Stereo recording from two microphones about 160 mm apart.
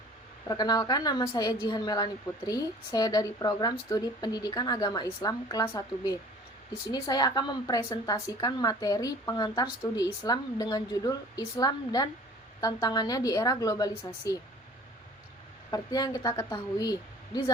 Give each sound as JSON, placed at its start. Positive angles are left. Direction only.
{"t": 0.4, "sound": "a woman's voice", "side_deg": 25}
{"t": 15.7, "sound": "a woman's voice", "side_deg": 25}